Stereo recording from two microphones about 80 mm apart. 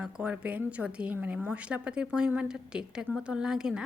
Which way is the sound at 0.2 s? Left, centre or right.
Centre.